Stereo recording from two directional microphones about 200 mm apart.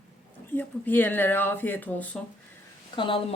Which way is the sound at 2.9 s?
25° left (ahead or behind).